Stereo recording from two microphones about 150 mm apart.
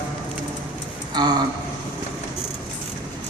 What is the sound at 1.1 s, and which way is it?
Speech, 25° right (ahead or behind).